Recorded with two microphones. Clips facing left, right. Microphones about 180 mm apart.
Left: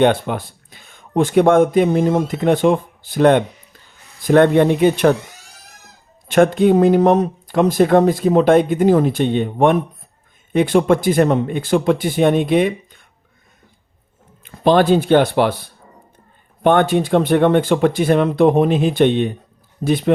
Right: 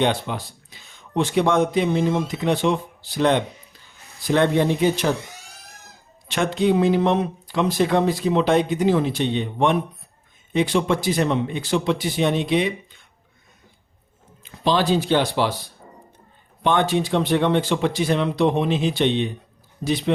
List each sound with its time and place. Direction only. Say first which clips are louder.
0.0 s speech: left 7 dB; 55° left (ahead or behind)
6.2 s speech: left 8 dB; 50° left (ahead or behind)
14.4 s speech: left 7 dB; 55° left (ahead or behind)